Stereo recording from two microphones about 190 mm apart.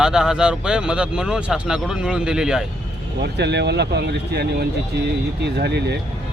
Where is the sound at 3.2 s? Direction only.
65° right (ahead or behind).